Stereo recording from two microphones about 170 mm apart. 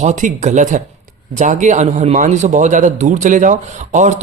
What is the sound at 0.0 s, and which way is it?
Speech, 45° right (ahead or behind).